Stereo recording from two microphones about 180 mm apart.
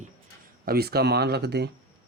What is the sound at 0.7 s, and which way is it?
Speech, 60° right (ahead or behind).